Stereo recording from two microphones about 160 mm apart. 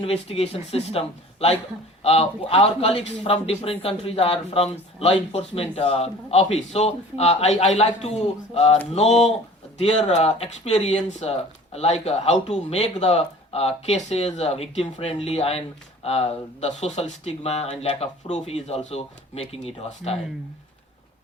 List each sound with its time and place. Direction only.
0.0 s a man's voice: 40° left (ahead or behind)
10.2 s a man's voice: 40° left (ahead or behind)